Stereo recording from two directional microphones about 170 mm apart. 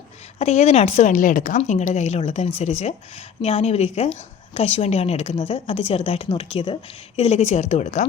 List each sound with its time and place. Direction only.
0.3 s a woman's voice: 40° left (ahead or behind)